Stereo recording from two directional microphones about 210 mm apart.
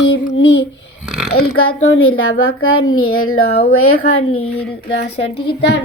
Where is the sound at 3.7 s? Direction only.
90° left.